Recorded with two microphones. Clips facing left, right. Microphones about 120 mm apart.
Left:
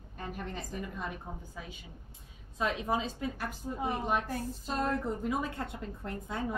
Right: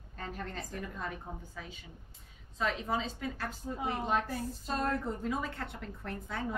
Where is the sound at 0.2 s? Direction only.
15° left (ahead or behind).